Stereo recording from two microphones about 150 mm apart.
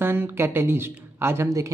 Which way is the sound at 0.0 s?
15° right (ahead or behind).